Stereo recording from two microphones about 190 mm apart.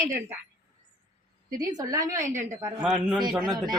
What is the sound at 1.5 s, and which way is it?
Speech, 20° right (ahead or behind).